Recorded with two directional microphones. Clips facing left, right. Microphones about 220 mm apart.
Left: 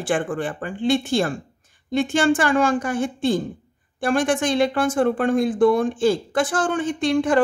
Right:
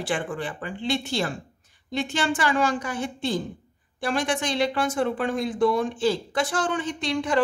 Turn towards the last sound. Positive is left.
turn(degrees=50)  # may be behind; listen again after turning